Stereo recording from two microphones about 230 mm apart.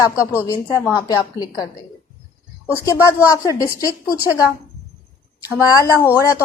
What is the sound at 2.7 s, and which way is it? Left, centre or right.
A woman's voice, centre.